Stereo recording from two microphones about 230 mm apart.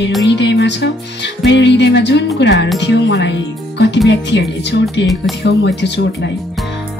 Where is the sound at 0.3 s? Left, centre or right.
Left.